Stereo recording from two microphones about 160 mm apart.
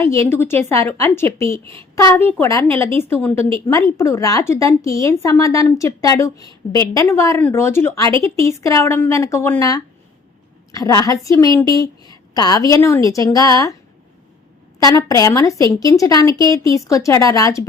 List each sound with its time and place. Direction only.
0.0 s a woman's voice: 20° left (ahead or behind)
14.8 s a woman's voice: 20° left (ahead or behind)